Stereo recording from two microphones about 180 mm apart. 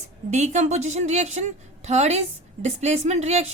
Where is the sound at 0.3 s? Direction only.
40° right (ahead or behind).